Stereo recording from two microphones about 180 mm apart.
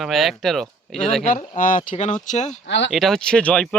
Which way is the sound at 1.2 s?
50° left (ahead or behind).